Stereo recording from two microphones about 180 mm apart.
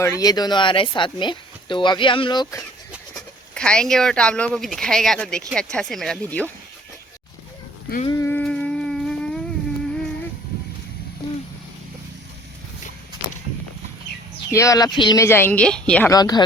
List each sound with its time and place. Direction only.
0.0 s speech: 20° left (ahead or behind)
3.5 s speech: 5° left (ahead or behind)
8.0 s a sound: 15° left (ahead or behind)
14.5 s speech: 20° left (ahead or behind)
16.0 s speech: 20° left (ahead or behind)